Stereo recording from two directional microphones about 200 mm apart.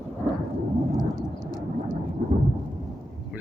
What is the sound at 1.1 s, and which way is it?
Vehicle, 20° left (ahead or behind).